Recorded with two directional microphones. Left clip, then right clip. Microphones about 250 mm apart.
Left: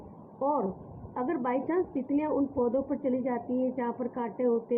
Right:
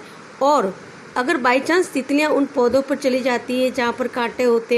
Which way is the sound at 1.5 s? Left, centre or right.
Right.